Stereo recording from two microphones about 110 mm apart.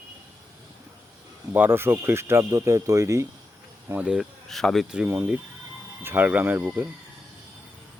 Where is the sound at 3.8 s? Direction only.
10° right (ahead or behind).